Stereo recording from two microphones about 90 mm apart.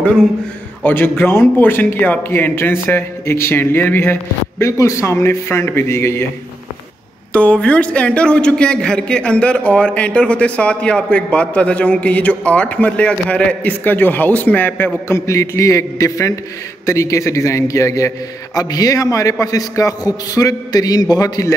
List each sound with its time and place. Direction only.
0.8 s a man's voice: 25° left (ahead or behind)
7.3 s a man's voice: 15° left (ahead or behind)
15.0 s a man's voice: 35° left (ahead or behind)